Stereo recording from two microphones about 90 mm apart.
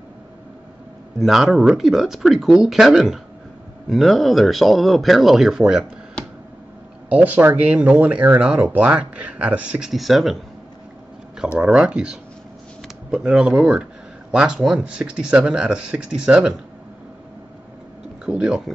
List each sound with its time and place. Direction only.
1.2 s speech: centre (ahead or behind)
6.2 s a sound: 10° left (ahead or behind)
7.1 s speech: 15° right (ahead or behind)
9.8 s speech: centre (ahead or behind)
11.5 s speech: 10° right (ahead or behind)
13.2 s speech: 5° right (ahead or behind)
18.2 s speech: 10° right (ahead or behind)